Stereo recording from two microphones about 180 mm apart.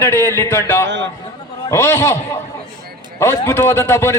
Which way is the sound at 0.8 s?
80° right.